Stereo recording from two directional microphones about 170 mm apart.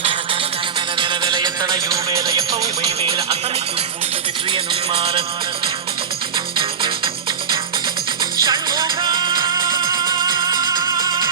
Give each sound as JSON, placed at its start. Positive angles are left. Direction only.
{"t": 0.9, "sound": "music", "side_deg": -25}
{"t": 4.5, "sound": "music", "side_deg": -30}
{"t": 6.6, "sound": "music", "side_deg": -30}
{"t": 8.2, "sound": "music", "side_deg": -25}